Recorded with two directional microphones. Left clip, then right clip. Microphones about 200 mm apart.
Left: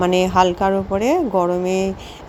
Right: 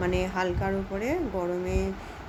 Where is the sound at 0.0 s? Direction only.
35° left (ahead or behind).